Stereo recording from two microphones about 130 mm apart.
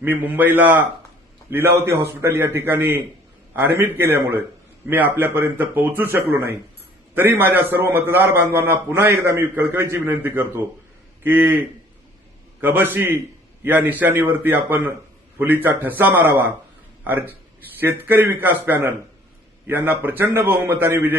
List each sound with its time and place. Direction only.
0.0 s a man's voice: 15° right (ahead or behind)
12.6 s a man's voice: 15° right (ahead or behind)